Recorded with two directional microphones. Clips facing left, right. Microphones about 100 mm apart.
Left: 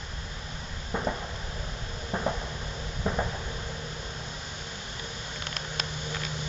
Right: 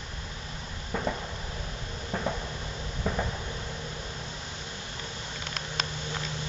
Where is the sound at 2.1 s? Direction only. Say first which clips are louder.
Left 1 dB; 20° left (ahead or behind).